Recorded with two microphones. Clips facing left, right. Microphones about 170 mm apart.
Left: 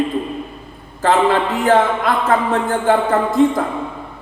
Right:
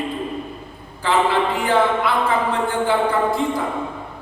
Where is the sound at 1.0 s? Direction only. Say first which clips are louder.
Left 4 dB; 45° left (ahead or behind).